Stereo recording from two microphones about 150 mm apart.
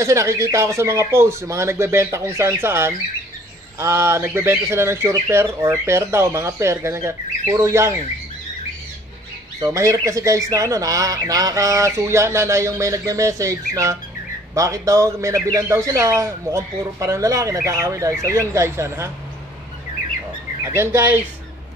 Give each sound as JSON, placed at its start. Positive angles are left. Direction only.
{"t": 0.0, "sound": "speech", "side_deg": -20}
{"t": 9.7, "sound": "speech", "side_deg": -20}
{"t": 20.6, "sound": "speech", "side_deg": -15}